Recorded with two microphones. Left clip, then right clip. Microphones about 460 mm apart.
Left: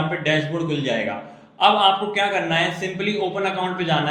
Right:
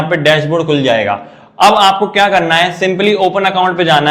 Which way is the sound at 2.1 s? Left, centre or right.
Right.